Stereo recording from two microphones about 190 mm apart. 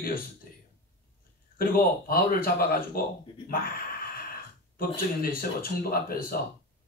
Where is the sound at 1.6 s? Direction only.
50° left (ahead or behind).